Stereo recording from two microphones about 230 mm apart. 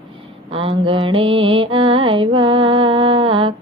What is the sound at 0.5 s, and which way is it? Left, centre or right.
Mantra, right.